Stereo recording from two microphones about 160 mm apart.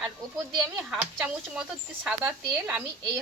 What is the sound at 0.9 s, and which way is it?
Speech, 5° right (ahead or behind).